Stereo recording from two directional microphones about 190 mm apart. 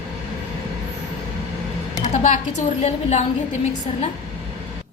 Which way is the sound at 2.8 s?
35° left (ahead or behind).